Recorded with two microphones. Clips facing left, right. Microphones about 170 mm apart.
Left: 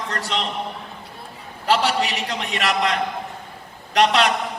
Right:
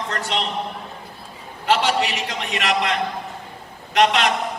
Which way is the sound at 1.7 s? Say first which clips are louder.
Even; 35° left (ahead or behind).